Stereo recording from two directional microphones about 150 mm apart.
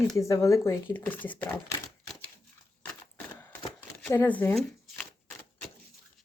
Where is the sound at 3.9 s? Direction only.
15° left (ahead or behind).